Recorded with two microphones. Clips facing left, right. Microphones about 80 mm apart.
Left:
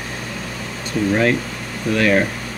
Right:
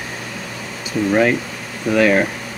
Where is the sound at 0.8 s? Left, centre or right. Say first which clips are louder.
Right 2 dB; centre.